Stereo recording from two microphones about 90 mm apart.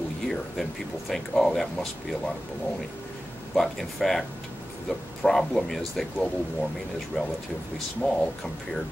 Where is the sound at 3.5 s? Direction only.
Centre (ahead or behind).